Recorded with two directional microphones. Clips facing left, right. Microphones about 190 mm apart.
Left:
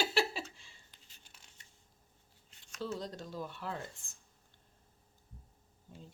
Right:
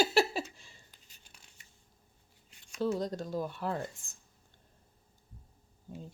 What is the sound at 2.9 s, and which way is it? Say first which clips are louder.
Speech: right 7 dB; 45° right (ahead or behind).